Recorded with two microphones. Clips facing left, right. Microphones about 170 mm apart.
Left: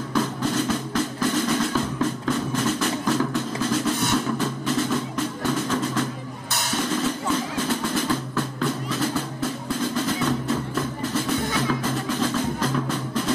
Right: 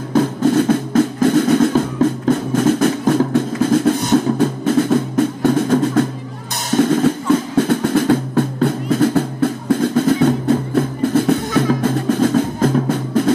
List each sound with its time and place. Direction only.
0.1 s music: 50° right (ahead or behind)
3.3 s drum: 55° right (ahead or behind)
4.1 s music: 50° right (ahead or behind)